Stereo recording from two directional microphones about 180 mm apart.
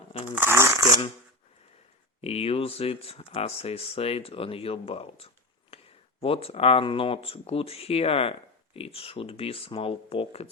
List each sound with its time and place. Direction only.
0.3 s speech: 10° right (ahead or behind)
2.2 s speech: 35° left (ahead or behind)